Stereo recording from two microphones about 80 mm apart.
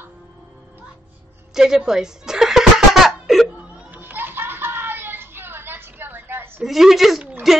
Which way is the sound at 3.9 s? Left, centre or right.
Right.